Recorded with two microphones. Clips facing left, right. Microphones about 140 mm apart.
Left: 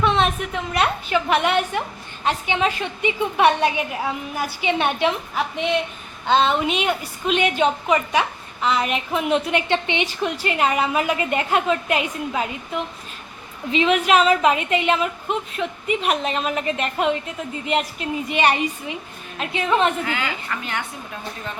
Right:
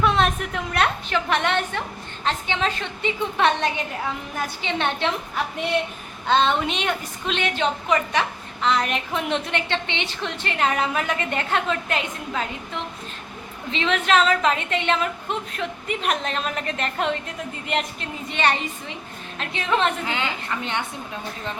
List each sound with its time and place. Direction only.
0.0 s a woman's voice: centre (ahead or behind)
5.5 s a woman's voice: centre (ahead or behind)
20.1 s a woman's voice: 25° right (ahead or behind)